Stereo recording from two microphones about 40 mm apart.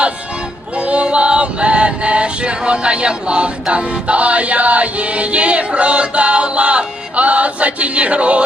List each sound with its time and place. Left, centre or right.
0.8 s choir: right